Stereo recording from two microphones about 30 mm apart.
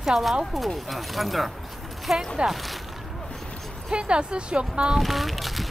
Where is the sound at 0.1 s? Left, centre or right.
Centre.